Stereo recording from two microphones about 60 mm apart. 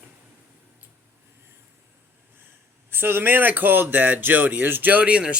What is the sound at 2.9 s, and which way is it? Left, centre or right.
Speech, right.